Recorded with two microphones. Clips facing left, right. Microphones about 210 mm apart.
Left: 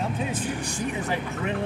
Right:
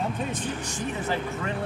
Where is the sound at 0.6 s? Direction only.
15° left (ahead or behind).